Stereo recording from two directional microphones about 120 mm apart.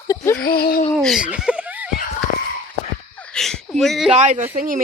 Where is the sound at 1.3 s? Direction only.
10° right (ahead or behind).